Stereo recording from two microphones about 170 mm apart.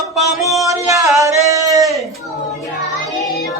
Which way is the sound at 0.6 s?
20° right (ahead or behind).